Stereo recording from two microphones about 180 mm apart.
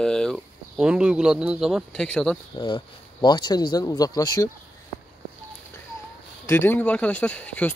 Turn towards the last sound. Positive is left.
turn(degrees=10)  # may be behind; listen again after turning